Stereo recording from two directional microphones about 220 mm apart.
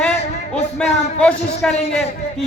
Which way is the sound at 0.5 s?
5° left (ahead or behind).